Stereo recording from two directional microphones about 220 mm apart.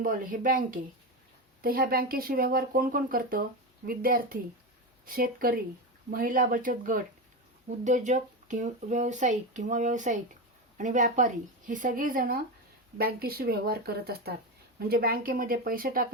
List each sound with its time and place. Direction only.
0.0 s speech: 40° right (ahead or behind)